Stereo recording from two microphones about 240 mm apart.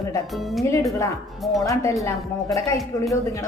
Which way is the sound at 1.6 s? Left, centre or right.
Centre.